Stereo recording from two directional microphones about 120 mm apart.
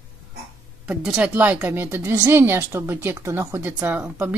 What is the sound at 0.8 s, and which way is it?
Speech, 10° right (ahead or behind).